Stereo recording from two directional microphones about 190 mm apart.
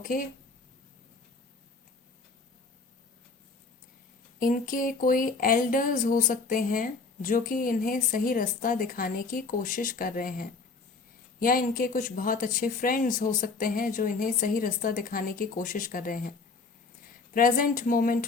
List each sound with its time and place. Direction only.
0.0 s speech: 45° left (ahead or behind)
4.4 s speech: 45° left (ahead or behind)
17.3 s speech: 45° left (ahead or behind)